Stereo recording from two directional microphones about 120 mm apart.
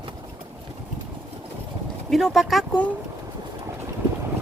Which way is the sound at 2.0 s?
Centre (ahead or behind).